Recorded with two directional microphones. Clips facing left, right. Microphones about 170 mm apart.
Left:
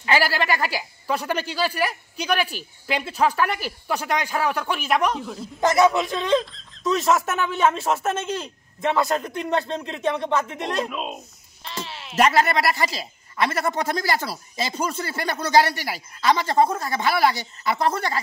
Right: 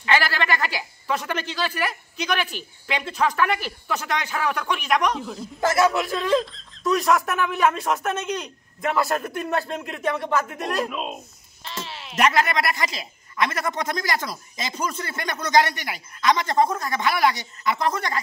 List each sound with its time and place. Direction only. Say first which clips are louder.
0.1 s a man's voice: left 1 dB; 10° left (ahead or behind)
5.9 s speech: even; 20° left (ahead or behind)
6.3 s speech: left 1 dB; centre (ahead or behind)
6.9 s speech: even; 25° left (ahead or behind)
10.9 s a man's voice: even; centre (ahead or behind)
12.2 s a man's voice: left 2 dB; 35° left (ahead or behind)